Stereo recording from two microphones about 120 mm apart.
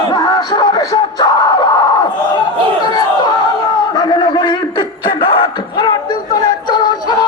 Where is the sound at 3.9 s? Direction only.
40° left (ahead or behind).